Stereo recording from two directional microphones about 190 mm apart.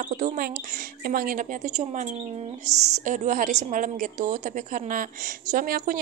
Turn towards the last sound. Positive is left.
turn(degrees=-45)  # may be behind; listen again after turning